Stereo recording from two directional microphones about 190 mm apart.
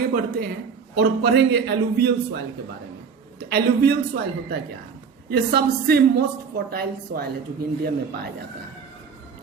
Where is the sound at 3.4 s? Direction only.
55° right (ahead or behind).